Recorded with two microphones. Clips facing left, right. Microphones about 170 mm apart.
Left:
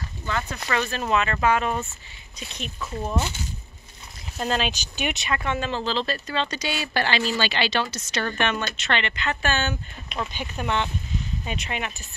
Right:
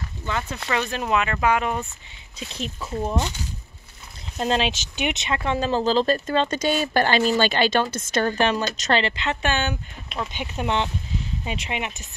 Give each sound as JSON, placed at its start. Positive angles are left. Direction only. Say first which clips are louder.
{"t": 0.7, "sound": "speech", "louder": "right 1 dB", "side_deg": -15}
{"t": 2.4, "sound": "speech", "louder": "right 3 dB", "side_deg": -30}
{"t": 4.4, "sound": "speech", "louder": "right 3 dB", "side_deg": -25}
{"t": 10.0, "sound": "speech", "louder": "right 1 dB", "side_deg": 0}
{"t": 10.3, "sound": "speech", "louder": "right 3 dB", "side_deg": -20}